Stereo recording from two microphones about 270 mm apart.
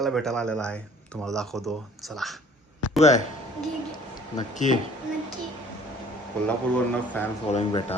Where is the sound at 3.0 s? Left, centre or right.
Left.